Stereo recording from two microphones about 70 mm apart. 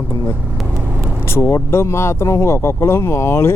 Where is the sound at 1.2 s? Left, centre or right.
Left.